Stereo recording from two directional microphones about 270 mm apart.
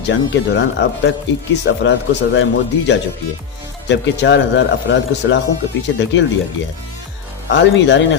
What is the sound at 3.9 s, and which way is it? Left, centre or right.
Speech, left.